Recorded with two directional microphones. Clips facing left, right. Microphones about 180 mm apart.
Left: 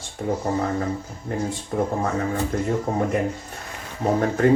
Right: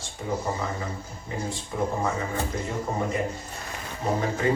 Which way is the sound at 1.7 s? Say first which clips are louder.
Left 4 dB; 55° left (ahead or behind).